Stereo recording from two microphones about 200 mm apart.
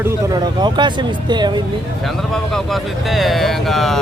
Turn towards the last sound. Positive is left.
turn(degrees=0)  # may be behind; listen again after turning